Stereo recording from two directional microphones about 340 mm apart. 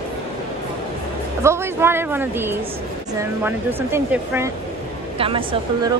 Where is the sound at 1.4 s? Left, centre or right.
Centre.